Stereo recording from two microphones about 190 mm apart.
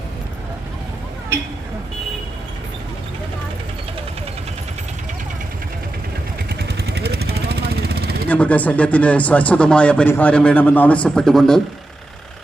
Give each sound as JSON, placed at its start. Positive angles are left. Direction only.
{"t": 6.5, "sound": "vehicle", "side_deg": -55}
{"t": 8.3, "sound": "speech", "side_deg": 5}